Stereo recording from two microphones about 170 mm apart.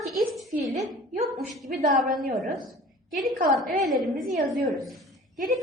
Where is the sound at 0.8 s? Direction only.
40° right (ahead or behind).